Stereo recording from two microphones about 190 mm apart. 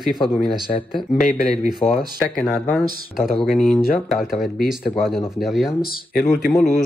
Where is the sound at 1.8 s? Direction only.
35° left (ahead or behind).